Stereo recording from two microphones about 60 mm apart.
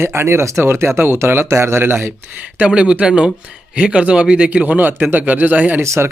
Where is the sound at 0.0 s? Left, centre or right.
Right.